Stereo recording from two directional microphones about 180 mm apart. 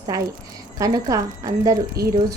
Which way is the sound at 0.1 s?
20° right (ahead or behind).